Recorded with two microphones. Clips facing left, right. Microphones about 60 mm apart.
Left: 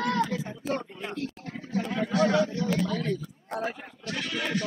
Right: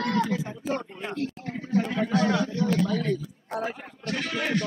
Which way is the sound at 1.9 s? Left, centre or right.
Right.